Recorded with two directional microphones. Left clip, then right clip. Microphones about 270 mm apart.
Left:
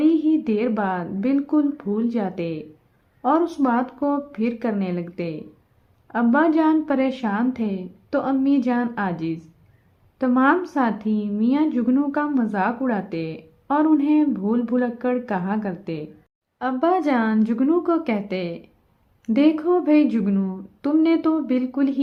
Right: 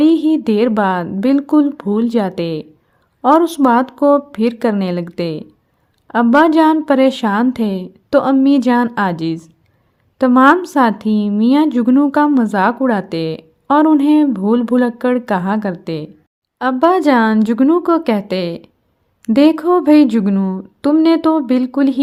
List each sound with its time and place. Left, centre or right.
0.0 s a woman's voice: right